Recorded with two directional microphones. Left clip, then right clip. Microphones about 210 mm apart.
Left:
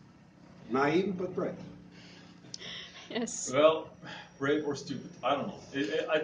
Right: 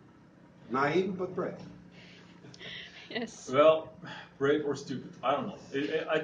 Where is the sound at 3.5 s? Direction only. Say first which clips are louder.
Right 2 dB; 5° left (ahead or behind).